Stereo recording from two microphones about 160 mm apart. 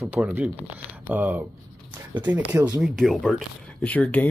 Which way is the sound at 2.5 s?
20° right (ahead or behind).